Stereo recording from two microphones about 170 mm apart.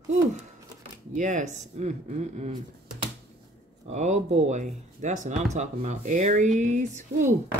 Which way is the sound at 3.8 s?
40° right (ahead or behind).